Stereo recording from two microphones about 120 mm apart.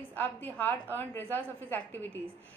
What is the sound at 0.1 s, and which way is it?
A woman's voice, 15° left (ahead or behind).